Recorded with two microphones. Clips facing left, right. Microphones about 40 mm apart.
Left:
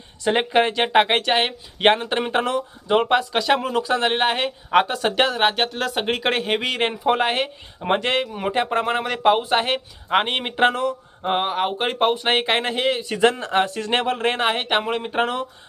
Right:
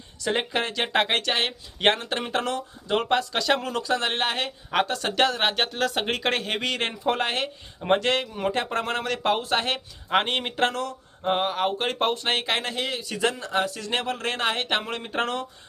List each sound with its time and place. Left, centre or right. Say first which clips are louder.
0.3 s speech: left 7 dB; left